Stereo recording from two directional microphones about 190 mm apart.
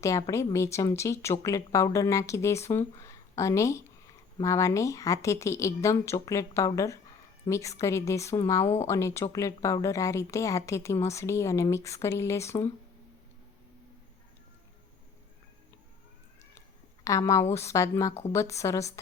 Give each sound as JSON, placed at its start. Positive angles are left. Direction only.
{"t": 0.0, "sound": "speech", "side_deg": 15}
{"t": 17.0, "sound": "speech", "side_deg": 15}